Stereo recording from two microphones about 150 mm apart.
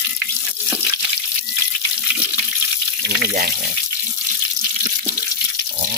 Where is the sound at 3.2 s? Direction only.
80° right.